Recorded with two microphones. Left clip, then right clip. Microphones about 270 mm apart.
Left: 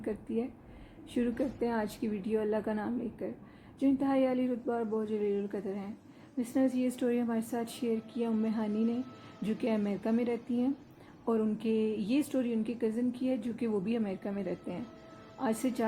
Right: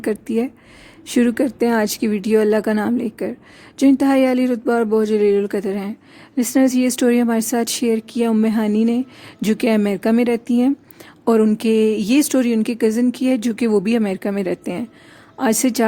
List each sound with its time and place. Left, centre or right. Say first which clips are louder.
0.0 s a woman's voice: right 15 dB; right